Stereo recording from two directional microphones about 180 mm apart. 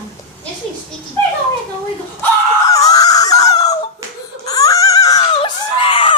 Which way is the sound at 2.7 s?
20° left (ahead or behind).